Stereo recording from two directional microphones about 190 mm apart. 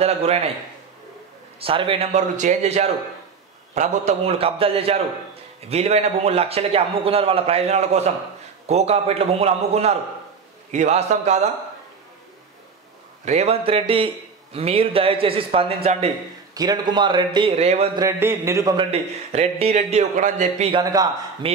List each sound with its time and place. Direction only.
0.0 s a man's voice: 35° right (ahead or behind)
1.6 s a man's voice: 30° right (ahead or behind)
13.2 s a man's voice: 35° right (ahead or behind)
16.5 s a man's voice: 20° right (ahead or behind)
17.9 s a man's voice: 15° right (ahead or behind)
18.9 s a man's voice: 35° right (ahead or behind)
20.9 s a man's voice: 20° right (ahead or behind)